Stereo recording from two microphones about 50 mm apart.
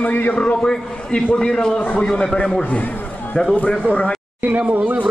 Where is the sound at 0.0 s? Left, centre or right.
Left.